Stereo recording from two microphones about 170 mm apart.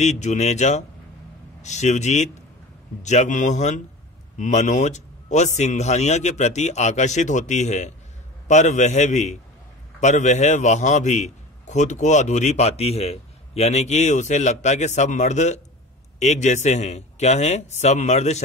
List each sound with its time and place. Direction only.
0.0 s a man's voice: 45° left (ahead or behind)